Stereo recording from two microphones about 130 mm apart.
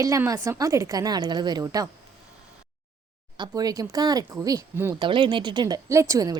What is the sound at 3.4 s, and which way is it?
A woman's voice, 30° right (ahead or behind).